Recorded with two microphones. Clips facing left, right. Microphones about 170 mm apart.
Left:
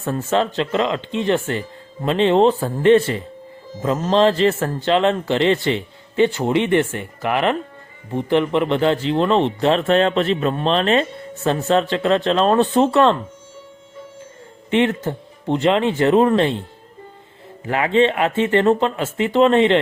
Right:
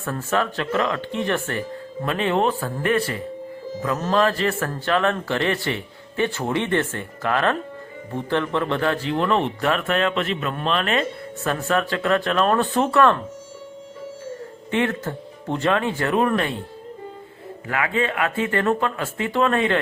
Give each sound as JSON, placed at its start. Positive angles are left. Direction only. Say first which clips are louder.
{"t": 0.0, "sound": "speech", "louder": "left 4 dB", "side_deg": 20}
{"t": 14.7, "sound": "speech", "louder": "left 5 dB", "side_deg": 20}
{"t": 17.7, "sound": "speech", "louder": "left 7 dB", "side_deg": 25}